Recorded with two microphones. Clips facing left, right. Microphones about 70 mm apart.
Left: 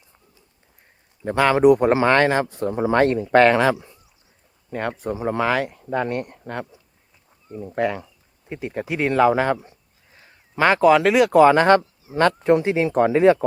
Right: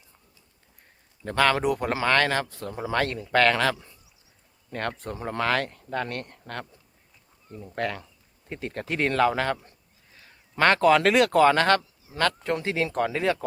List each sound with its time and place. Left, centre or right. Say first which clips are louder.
1.2 s speech: left 7 dB; centre
7.8 s speech: left 7 dB; centre
11.8 s speech: left 7 dB; left